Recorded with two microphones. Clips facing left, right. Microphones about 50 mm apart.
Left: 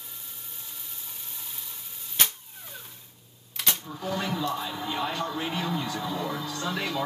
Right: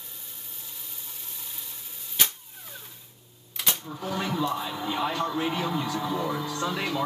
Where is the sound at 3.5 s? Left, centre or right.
Centre.